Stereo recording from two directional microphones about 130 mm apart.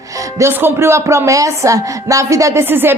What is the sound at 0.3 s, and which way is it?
A woman's voice, 20° right (ahead or behind).